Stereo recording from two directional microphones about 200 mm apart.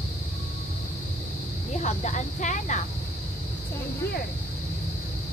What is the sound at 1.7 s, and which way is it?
Speech, 35° left (ahead or behind).